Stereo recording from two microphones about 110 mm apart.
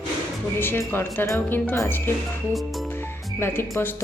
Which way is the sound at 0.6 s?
20° left (ahead or behind).